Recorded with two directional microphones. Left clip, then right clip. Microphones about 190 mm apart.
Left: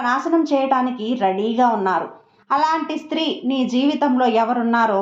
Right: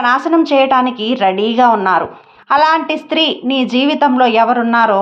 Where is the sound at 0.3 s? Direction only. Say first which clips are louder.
Right 7 dB; 25° right (ahead or behind).